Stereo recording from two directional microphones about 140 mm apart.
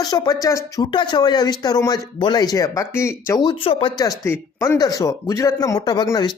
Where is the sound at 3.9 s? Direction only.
25° left (ahead or behind).